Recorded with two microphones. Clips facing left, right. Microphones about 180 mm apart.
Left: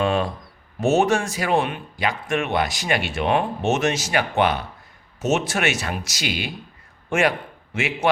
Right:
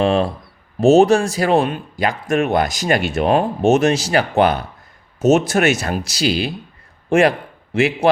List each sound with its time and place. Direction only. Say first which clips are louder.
0.0 s a man's voice: right 5 dB; 30° right (ahead or behind)